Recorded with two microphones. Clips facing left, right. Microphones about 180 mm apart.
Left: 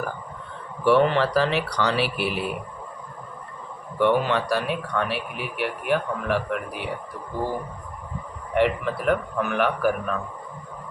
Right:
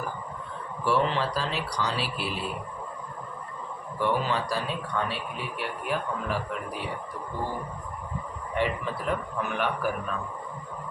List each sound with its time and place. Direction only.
0.9 s speech: 60° left (ahead or behind)
3.9 s speech: 65° left (ahead or behind)
8.5 s speech: 70° left (ahead or behind)